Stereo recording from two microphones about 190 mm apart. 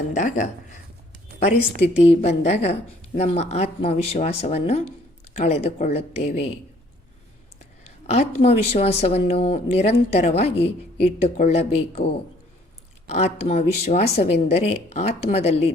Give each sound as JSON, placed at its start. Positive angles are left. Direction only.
{"t": 0.1, "sound": "speech", "side_deg": 40}
{"t": 2.0, "sound": "speech", "side_deg": 35}
{"t": 8.1, "sound": "speech", "side_deg": 35}